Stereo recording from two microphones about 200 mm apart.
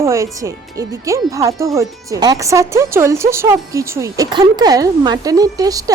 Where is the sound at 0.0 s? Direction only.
15° right (ahead or behind).